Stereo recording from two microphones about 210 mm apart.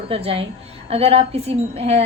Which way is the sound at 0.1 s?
30° right (ahead or behind).